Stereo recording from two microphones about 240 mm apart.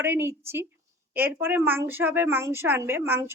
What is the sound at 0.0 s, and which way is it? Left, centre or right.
A woman's voice, centre.